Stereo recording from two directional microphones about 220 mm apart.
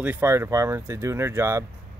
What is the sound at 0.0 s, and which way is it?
Speech, 10° right (ahead or behind).